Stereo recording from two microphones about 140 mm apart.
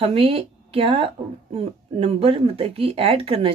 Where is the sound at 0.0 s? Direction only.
40° right (ahead or behind).